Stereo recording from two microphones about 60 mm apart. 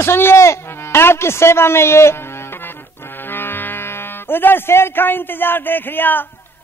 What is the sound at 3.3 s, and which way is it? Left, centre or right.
Speech, left.